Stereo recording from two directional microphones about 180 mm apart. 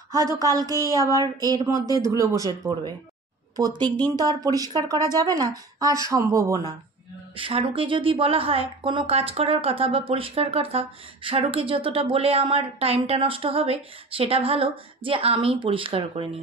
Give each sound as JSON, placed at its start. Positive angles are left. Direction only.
{"t": 0.1, "sound": "speech", "side_deg": -20}
{"t": 7.3, "sound": "speech", "side_deg": -30}